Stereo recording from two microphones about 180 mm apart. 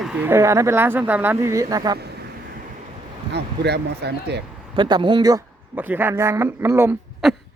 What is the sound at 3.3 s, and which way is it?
Speech, 70° right (ahead or behind).